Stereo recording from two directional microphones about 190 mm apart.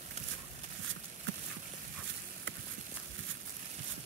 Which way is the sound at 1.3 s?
65° right (ahead or behind).